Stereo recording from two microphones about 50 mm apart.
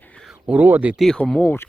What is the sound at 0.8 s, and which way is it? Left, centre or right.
Speech, right.